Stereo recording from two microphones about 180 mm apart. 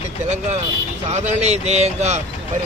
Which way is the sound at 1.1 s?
40° right (ahead or behind).